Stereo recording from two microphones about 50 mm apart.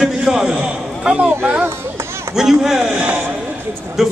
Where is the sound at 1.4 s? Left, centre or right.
Right.